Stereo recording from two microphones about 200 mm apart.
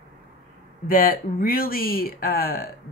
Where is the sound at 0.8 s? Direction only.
45° left (ahead or behind).